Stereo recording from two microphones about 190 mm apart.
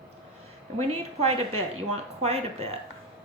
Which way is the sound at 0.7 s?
35° right (ahead or behind).